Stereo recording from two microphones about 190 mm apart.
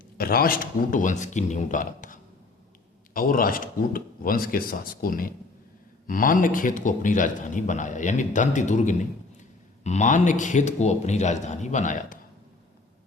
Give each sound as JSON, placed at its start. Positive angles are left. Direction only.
{"t": 0.2, "sound": "speech", "side_deg": 50}
{"t": 3.2, "sound": "speech", "side_deg": 45}